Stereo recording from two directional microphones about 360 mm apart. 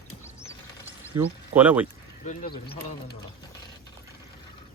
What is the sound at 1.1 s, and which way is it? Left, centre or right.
Speech, centre.